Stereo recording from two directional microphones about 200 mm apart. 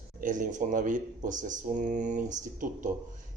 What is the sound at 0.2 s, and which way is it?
Speech, 40° right (ahead or behind).